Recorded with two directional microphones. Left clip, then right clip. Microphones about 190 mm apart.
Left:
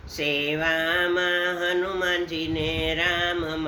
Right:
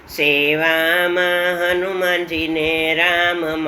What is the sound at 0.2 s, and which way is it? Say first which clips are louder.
Mantra: right 9 dB; 15° left (ahead or behind).